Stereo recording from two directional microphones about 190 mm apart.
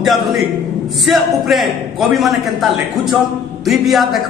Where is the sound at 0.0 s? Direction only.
Centre (ahead or behind).